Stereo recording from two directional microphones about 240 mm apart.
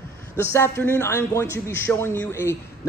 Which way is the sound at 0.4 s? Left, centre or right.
Centre.